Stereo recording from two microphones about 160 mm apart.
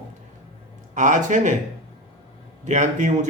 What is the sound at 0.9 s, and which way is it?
Speech, 50° right (ahead or behind).